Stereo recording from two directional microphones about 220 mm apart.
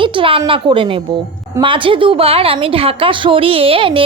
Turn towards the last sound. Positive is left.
turn(degrees=-25)  # may be behind; listen again after turning